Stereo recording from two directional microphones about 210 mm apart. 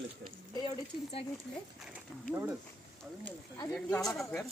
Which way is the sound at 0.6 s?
25° left (ahead or behind).